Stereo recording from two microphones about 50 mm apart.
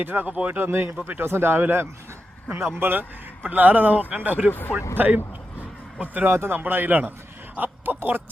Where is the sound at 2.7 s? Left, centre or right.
Right.